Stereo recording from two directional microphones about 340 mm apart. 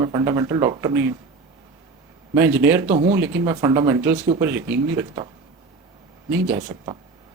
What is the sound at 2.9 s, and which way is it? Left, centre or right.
Speech, centre.